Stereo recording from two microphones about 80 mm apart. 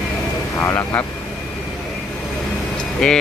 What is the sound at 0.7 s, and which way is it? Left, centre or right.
Speech, left.